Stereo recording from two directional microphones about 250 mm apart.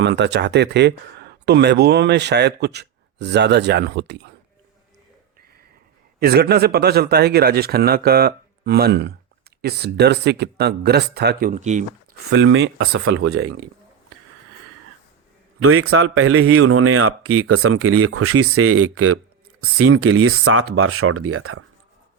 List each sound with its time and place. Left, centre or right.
0.0 s speech: right
6.1 s speech: right
12.3 s speech: right
13.2 s speech: right
15.6 s speech: right